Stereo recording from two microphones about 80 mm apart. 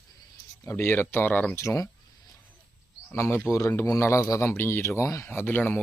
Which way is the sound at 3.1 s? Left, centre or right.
Left.